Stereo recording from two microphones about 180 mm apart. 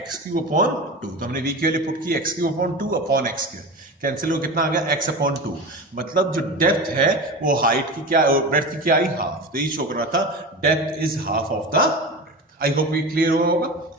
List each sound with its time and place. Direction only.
1.2 s a man's voice: 50° right (ahead or behind)